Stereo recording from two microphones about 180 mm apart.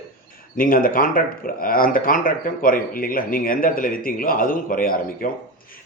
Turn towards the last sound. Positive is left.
turn(degrees=50)  # may be behind; listen again after turning